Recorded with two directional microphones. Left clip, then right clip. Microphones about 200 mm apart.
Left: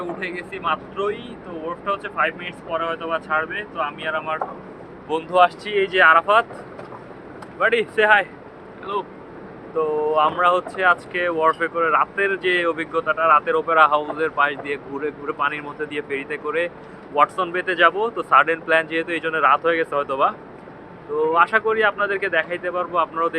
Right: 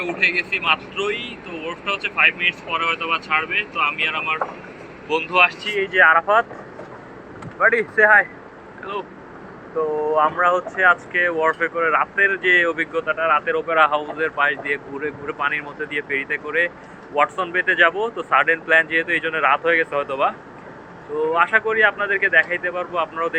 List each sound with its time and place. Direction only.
0.0 s speech: 20° left (ahead or behind)
5.0 s speech: 40° left (ahead or behind)
5.8 s speech: 20° left (ahead or behind)
7.9 s speech: 5° right (ahead or behind)
9.7 s speech: centre (ahead or behind)